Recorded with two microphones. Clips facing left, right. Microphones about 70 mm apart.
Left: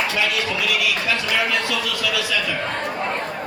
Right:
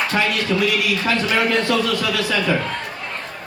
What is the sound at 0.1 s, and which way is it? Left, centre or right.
A man's voice, right.